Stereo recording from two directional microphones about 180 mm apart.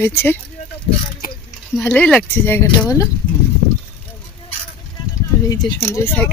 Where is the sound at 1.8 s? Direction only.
5° left (ahead or behind).